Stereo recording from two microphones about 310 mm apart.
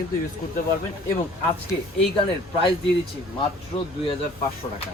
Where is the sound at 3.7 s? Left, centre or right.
Centre.